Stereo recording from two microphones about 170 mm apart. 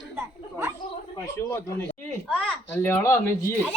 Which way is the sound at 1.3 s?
15° left (ahead or behind).